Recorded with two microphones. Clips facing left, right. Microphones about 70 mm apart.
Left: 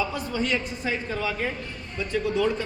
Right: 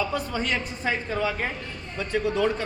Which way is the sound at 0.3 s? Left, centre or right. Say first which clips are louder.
Left 1 dB; right.